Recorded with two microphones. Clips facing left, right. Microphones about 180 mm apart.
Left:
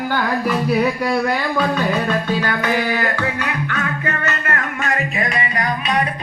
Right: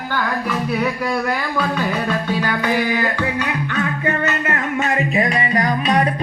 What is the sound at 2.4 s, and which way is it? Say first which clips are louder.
Music: even; 15° right (ahead or behind).